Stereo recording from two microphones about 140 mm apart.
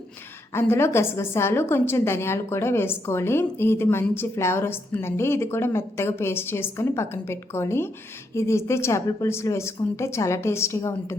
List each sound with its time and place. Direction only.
0.5 s a woman's voice: 15° left (ahead or behind)